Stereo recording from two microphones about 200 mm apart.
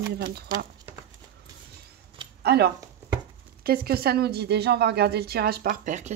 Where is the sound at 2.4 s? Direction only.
55° right (ahead or behind); by 6.1 s 40° right (ahead or behind).